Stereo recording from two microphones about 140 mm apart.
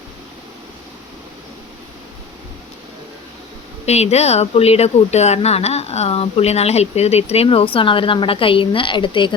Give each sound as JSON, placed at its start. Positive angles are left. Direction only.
{"t": 3.8, "sound": "speech", "side_deg": 50}